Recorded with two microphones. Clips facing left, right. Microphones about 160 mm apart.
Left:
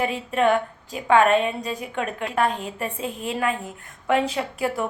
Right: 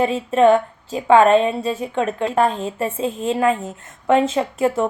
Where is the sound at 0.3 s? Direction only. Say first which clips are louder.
Right 7 dB; 35° right (ahead or behind).